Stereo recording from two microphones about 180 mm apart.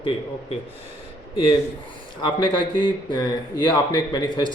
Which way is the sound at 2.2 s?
25° left (ahead or behind).